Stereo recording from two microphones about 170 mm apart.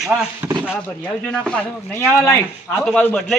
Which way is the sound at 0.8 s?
5° left (ahead or behind).